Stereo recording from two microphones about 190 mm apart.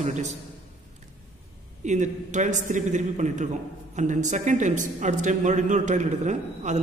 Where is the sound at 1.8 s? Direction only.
40° right (ahead or behind).